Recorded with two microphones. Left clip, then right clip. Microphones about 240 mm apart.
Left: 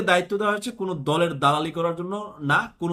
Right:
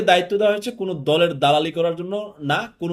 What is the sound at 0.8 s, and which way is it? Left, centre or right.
Speech, centre.